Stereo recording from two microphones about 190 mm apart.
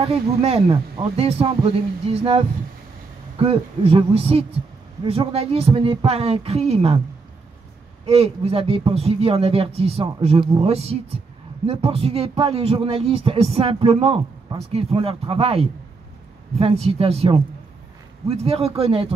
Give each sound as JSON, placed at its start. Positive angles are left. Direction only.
{"t": 0.0, "sound": "speech", "side_deg": -30}
{"t": 8.0, "sound": "speech", "side_deg": -30}